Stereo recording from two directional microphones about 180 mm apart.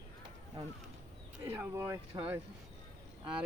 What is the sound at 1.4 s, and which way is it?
Speech, 10° right (ahead or behind).